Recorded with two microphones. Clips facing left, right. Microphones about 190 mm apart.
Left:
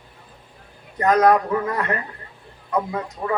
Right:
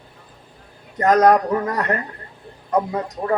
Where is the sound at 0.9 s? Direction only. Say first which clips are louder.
Right 2 dB; 45° right (ahead or behind).